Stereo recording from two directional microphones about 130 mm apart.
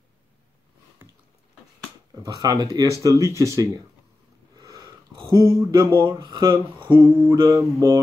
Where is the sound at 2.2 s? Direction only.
30° right (ahead or behind).